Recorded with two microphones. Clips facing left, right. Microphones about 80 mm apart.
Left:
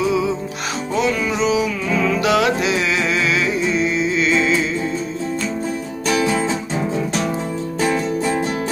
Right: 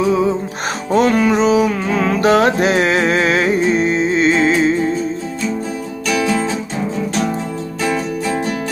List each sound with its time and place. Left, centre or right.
0.0 s music: right